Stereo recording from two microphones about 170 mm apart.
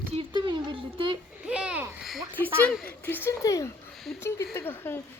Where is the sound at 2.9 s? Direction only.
10° left (ahead or behind).